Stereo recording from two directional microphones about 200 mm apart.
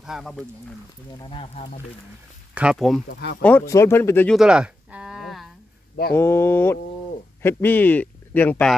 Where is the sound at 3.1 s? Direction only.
50° left (ahead or behind).